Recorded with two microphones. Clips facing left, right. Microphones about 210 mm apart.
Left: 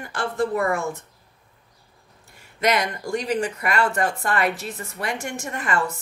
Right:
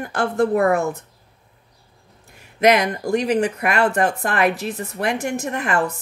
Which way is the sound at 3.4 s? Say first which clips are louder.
Right 4 dB; 60° right (ahead or behind).